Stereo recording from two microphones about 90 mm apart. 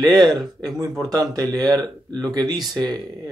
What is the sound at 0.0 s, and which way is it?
Speech, 50° right (ahead or behind).